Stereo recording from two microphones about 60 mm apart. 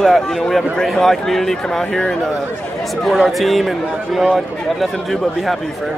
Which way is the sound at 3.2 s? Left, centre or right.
Centre.